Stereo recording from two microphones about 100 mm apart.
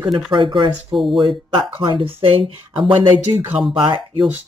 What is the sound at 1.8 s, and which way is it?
Speech, 60° right (ahead or behind).